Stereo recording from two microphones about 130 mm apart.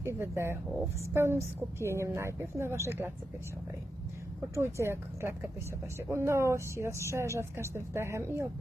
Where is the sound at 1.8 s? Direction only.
20° right (ahead or behind).